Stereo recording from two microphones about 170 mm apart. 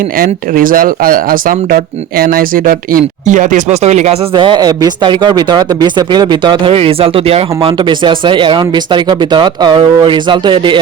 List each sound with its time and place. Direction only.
0.2 s speech: 55° right (ahead or behind); by 10.8 s 30° right (ahead or behind)